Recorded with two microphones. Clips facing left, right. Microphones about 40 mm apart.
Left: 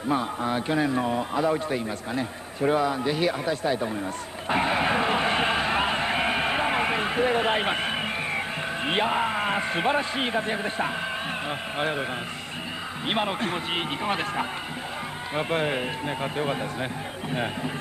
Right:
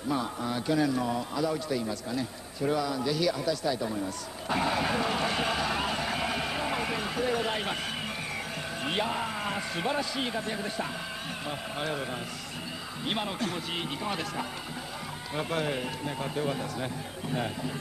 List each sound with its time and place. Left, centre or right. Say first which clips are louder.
0.1 s a man's voice: left 5 dB; left
4.5 s a sound: left 5 dB; left
11.4 s a man's voice: left 3 dB; left
13.1 s a man's voice: left 6 dB; left